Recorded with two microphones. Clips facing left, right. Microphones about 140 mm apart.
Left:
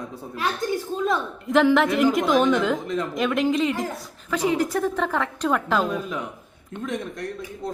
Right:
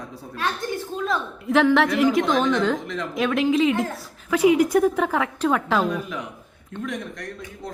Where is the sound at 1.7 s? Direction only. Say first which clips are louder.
Right 1 dB; centre (ahead or behind).